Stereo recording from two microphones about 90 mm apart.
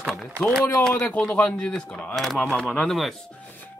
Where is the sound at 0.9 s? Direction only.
15° left (ahead or behind).